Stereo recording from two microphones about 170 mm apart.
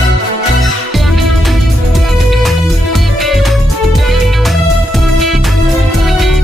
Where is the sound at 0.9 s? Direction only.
Centre (ahead or behind).